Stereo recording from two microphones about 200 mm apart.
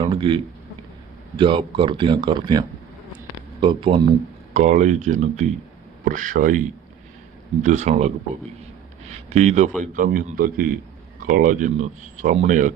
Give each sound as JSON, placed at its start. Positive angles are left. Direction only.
{"t": 0.0, "sound": "a man's voice", "side_deg": -25}
{"t": 7.6, "sound": "speech", "side_deg": -35}
{"t": 9.3, "sound": "a man's voice", "side_deg": -35}